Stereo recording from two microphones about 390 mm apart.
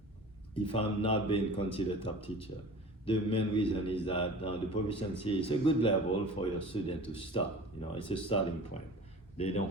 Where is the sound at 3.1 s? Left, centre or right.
Centre.